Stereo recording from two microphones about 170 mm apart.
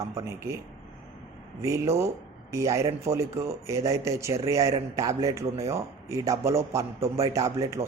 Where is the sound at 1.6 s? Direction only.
15° right (ahead or behind).